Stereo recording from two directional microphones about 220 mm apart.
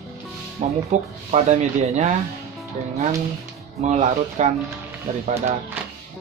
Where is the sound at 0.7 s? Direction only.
30° right (ahead or behind).